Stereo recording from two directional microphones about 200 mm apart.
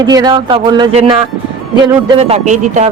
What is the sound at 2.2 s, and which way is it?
Speech, 30° right (ahead or behind).